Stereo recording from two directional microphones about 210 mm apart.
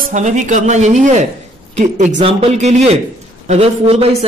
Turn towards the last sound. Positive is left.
turn(degrees=-30)  # may be behind; listen again after turning